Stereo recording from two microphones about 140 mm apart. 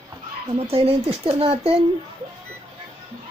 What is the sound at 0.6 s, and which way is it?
Speech, 45° right (ahead or behind).